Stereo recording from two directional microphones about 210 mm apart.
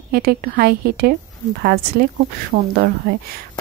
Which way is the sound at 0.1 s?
45° right (ahead or behind).